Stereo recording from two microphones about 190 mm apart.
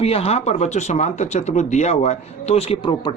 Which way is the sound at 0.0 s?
30° left (ahead or behind).